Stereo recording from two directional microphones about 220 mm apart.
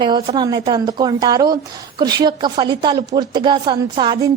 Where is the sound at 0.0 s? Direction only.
20° right (ahead or behind).